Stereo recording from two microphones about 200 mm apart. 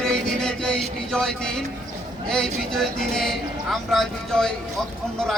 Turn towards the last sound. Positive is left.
turn(degrees=5)  # may be behind; listen again after turning